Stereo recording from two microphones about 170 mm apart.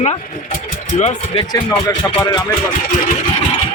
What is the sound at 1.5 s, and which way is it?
Speech, 20° left (ahead or behind).